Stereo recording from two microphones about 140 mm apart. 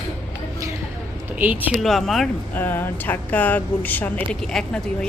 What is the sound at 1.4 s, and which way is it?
Speech, 10° right (ahead or behind).